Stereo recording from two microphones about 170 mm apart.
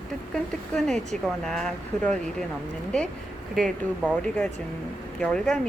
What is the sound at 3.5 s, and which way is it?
Speech, 5° right (ahead or behind).